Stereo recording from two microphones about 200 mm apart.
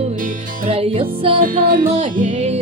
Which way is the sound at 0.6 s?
30° right (ahead or behind).